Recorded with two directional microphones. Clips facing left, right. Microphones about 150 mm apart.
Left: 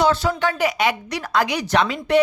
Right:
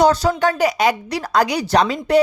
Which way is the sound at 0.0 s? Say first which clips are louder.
Right 4 dB; 40° right (ahead or behind).